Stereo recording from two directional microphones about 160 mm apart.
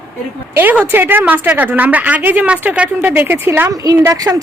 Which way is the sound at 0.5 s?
10° right (ahead or behind).